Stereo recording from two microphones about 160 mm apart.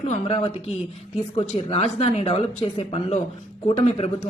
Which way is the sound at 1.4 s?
40° left (ahead or behind).